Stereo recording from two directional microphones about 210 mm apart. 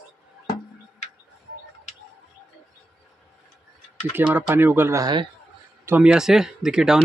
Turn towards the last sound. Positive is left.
turn(degrees=-5)  # may be behind; listen again after turning